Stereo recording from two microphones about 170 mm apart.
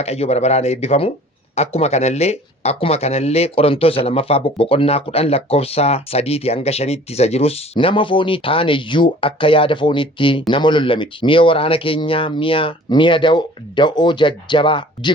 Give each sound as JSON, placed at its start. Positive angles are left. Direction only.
{"t": 0.0, "sound": "speech", "side_deg": 40}